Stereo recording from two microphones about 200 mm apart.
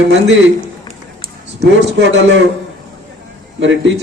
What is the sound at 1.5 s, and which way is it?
Speech, 60° right (ahead or behind).